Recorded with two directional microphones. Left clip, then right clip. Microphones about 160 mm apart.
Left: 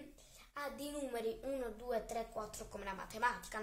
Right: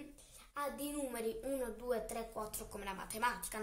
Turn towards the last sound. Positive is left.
turn(degrees=10)  # may be behind; listen again after turning